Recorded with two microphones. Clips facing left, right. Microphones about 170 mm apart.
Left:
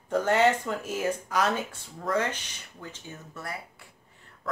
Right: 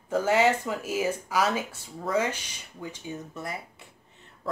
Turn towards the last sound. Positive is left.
turn(degrees=-20)  # may be behind; listen again after turning